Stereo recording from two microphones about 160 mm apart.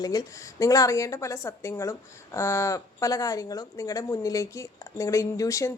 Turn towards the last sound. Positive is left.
turn(degrees=20)  # may be behind; listen again after turning